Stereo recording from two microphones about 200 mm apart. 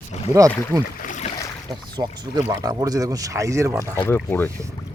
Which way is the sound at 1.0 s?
40° left (ahead or behind).